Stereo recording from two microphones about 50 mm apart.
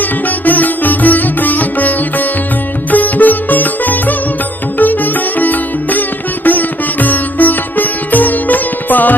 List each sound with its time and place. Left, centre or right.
0.0 s music: left